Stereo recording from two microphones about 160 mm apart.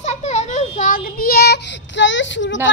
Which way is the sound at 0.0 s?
45° left (ahead or behind).